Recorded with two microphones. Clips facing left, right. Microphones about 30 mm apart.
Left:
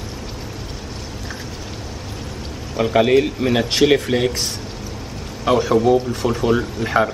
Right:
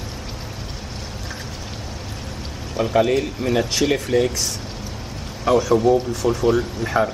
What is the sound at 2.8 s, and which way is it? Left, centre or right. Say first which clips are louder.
A man's voice: left 3 dB; left.